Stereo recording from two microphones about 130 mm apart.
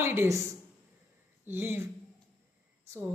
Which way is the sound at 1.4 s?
15° right (ahead or behind).